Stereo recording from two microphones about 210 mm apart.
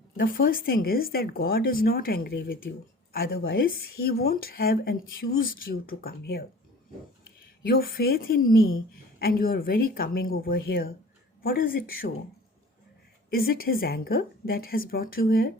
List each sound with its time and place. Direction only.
0.3 s speech: 45° left (ahead or behind)
7.7 s speech: 45° left (ahead or behind)
13.3 s speech: 45° left (ahead or behind)